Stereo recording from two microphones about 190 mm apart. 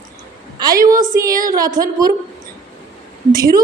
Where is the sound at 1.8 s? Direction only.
20° right (ahead or behind).